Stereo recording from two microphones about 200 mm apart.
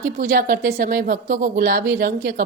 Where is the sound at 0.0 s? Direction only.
45° right (ahead or behind).